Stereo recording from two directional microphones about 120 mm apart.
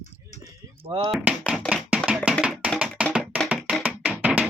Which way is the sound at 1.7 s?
10° left (ahead or behind).